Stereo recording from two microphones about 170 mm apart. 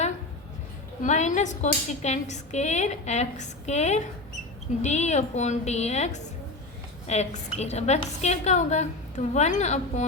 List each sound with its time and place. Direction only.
1.0 s a woman's voice: 45° left (ahead or behind)